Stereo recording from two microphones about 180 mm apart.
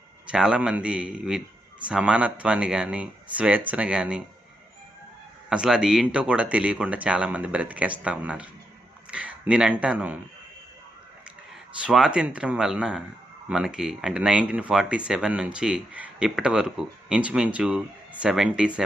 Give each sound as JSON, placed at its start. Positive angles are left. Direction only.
{"t": 0.3, "sound": "speech", "side_deg": -5}
{"t": 5.5, "sound": "speech", "side_deg": -5}
{"t": 11.9, "sound": "speech", "side_deg": -5}